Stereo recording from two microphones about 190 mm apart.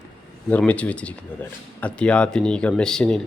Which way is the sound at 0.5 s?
5° left (ahead or behind).